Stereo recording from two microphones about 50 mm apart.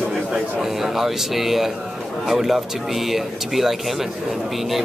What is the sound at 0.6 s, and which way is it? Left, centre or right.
Speech, centre.